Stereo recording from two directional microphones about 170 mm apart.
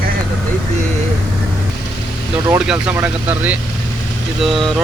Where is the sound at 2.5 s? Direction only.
5° right (ahead or behind).